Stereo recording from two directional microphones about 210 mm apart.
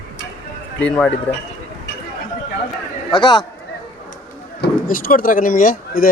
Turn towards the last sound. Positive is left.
turn(degrees=40)  # may be behind; listen again after turning